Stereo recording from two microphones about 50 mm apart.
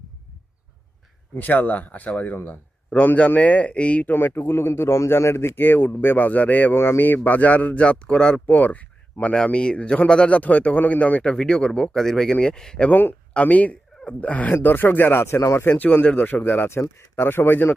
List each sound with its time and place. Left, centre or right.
1.4 s a man's voice: left
2.3 s a man's voice: left
3.2 s speech: left
4.1 s speech: left
6.7 s speech: left; by 8.4 s centre
8.4 s a man's voice: left
9.3 s speech: centre
11.2 s speech: centre
12.9 s a man's voice: left
13.3 s a man's voice: left
15.2 s speech: left
15.6 s a man's voice: left
16.6 s speech: left